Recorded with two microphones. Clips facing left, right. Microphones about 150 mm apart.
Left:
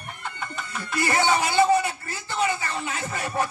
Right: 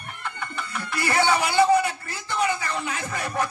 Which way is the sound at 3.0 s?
15° left (ahead or behind).